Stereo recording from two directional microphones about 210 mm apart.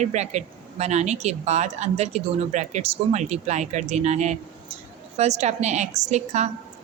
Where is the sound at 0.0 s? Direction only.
35° right (ahead or behind).